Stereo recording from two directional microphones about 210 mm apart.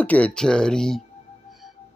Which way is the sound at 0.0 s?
5° left (ahead or behind).